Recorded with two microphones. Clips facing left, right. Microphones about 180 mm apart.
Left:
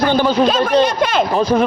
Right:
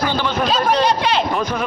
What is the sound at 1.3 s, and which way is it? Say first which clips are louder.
Speech: left 7 dB; 35° left (ahead or behind).